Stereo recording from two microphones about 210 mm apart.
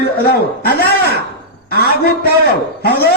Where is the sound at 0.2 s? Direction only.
50° left (ahead or behind).